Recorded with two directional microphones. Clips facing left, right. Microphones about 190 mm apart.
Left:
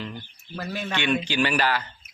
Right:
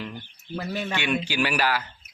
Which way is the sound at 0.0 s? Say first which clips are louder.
Even; 10° right (ahead or behind).